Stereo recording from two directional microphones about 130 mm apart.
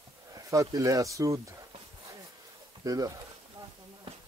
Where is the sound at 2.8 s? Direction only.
30° right (ahead or behind).